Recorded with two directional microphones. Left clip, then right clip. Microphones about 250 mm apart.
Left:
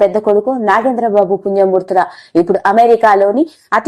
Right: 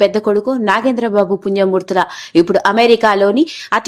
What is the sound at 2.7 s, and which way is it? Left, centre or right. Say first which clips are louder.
Speech: left 5 dB; centre.